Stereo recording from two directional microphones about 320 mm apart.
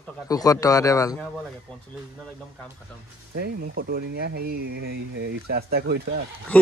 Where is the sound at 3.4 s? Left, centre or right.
Right.